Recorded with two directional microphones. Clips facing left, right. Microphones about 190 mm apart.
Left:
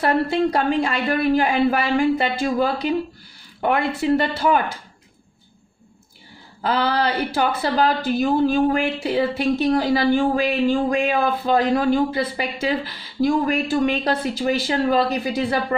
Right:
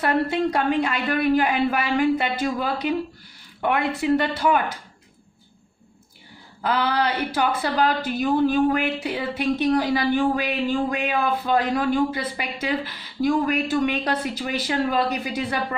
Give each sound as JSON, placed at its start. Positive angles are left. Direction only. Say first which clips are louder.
{"t": 0.0, "sound": "a woman's voice", "louder": "left 2 dB", "side_deg": 30}
{"t": 6.6, "sound": "a woman's voice", "louder": "left 2 dB", "side_deg": 30}